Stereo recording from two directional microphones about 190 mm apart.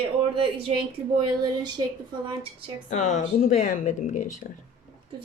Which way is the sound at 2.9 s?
40° left (ahead or behind).